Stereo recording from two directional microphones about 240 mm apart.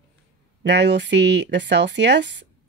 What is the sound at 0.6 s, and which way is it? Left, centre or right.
Speech, right.